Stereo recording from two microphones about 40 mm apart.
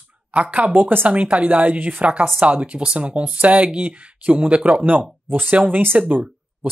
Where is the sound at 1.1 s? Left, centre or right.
Right.